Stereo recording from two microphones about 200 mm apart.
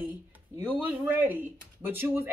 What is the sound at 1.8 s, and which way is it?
Speech, 10° right (ahead or behind).